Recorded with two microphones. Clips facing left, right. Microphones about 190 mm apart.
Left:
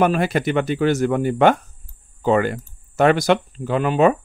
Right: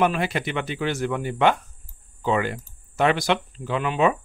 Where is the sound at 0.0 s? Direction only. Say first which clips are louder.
Left 5 dB; 45° left (ahead or behind).